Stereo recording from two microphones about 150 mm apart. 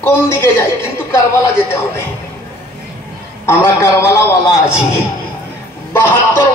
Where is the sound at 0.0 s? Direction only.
15° left (ahead or behind).